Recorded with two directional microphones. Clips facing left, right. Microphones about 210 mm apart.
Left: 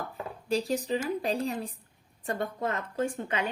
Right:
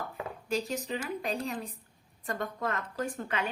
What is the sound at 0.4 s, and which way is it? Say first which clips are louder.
Speech: left 4 dB; 35° left (ahead or behind).